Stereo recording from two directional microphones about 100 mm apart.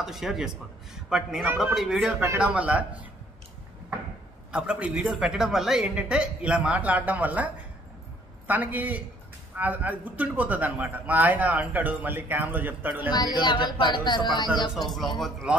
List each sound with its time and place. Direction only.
0.0 s a man's voice: 5° right (ahead or behind)
4.5 s a man's voice: 10° right (ahead or behind)
13.1 s speech: 45° left (ahead or behind)
14.7 s a man's voice: centre (ahead or behind)